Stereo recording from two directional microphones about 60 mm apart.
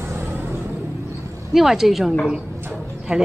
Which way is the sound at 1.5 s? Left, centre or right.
Centre.